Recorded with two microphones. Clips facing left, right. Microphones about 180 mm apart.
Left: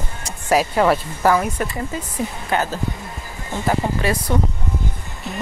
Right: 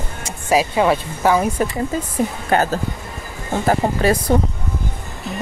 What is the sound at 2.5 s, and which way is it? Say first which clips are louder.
Speech: right 4 dB; 40° right (ahead or behind).